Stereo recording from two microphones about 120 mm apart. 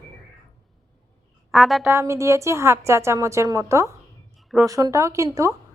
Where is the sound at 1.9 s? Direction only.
25° right (ahead or behind).